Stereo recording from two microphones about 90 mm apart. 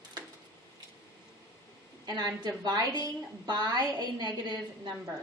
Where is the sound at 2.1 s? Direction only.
50° right (ahead or behind).